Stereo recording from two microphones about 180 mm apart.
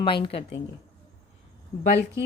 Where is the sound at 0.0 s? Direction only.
25° left (ahead or behind).